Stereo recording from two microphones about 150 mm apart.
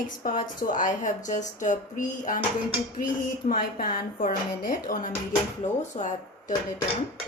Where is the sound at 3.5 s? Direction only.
75° left (ahead or behind).